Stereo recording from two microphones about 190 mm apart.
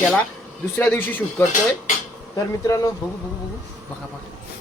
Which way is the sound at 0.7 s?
10° left (ahead or behind).